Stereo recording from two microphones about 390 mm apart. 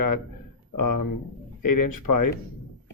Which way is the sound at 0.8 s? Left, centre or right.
Left.